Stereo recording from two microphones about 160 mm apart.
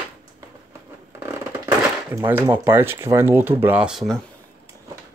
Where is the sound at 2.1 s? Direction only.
15° right (ahead or behind).